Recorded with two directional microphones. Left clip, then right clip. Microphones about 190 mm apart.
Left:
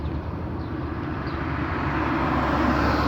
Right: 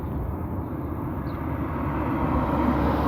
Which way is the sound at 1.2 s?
50° right (ahead or behind).